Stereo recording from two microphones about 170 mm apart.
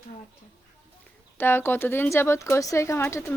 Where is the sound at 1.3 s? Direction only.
15° left (ahead or behind).